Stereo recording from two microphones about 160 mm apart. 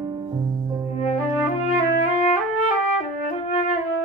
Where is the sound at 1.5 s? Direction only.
45° left (ahead or behind).